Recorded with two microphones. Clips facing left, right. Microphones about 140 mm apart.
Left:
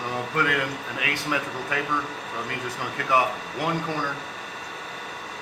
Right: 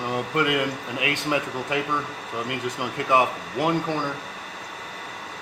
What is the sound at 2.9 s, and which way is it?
Speech, 20° right (ahead or behind).